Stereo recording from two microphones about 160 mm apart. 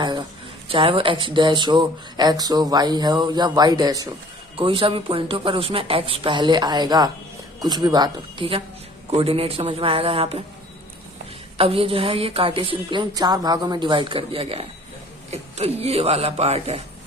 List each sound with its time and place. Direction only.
0.0 s a sound: 30° right (ahead or behind)
0.7 s speech: 35° right (ahead or behind)
4.5 s speech: 35° right (ahead or behind)
11.5 s speech: 35° right (ahead or behind)